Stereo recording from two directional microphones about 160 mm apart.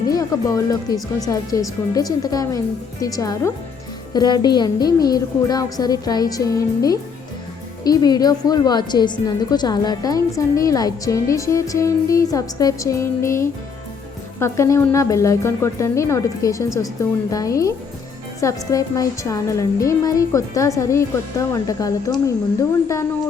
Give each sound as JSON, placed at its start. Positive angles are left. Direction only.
{"t": 0.1, "sound": "a woman's voice", "side_deg": 20}